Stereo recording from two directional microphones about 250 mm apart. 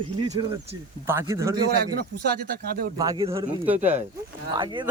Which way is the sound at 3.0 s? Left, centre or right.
Centre.